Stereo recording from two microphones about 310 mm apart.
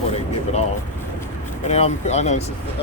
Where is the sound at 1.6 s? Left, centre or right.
Left.